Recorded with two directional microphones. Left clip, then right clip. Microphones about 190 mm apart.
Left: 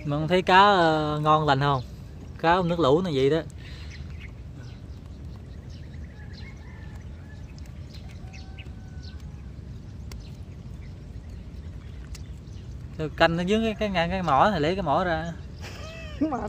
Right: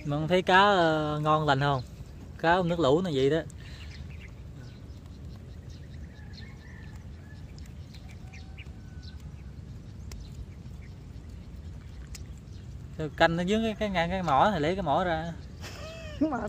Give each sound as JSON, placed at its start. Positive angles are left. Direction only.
{"t": 0.0, "sound": "speech", "side_deg": -5}
{"t": 12.9, "sound": "speech", "side_deg": -5}
{"t": 15.6, "sound": "a sound", "side_deg": -20}